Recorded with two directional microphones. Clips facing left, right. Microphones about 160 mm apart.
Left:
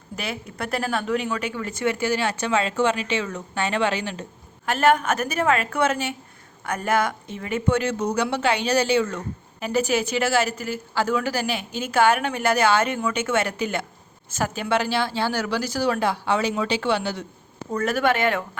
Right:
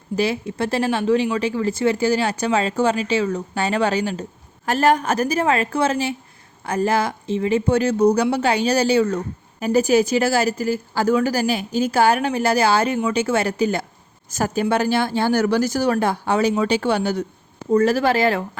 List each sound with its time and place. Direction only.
0.2 s speech: 30° right (ahead or behind)
17.7 s speech: 30° right (ahead or behind)